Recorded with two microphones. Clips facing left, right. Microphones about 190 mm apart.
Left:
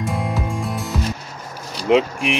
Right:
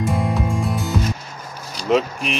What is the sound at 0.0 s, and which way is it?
Music, centre (ahead or behind).